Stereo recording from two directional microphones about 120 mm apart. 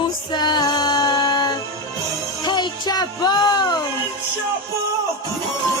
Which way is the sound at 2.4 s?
35° left (ahead or behind).